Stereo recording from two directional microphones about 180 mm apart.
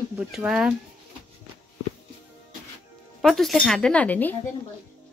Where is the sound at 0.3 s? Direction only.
5° right (ahead or behind).